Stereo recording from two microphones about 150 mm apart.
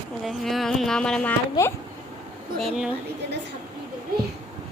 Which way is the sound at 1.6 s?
25° left (ahead or behind).